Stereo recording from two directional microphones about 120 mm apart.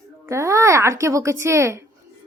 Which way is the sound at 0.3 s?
25° right (ahead or behind).